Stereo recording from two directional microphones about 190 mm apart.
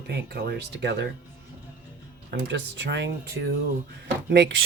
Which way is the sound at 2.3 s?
70° right (ahead or behind).